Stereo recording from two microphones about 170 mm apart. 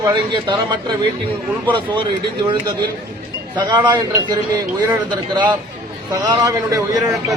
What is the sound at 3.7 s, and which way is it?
A man's voice, 25° right (ahead or behind).